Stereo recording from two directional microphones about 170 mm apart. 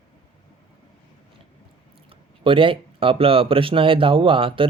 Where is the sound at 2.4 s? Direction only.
30° right (ahead or behind).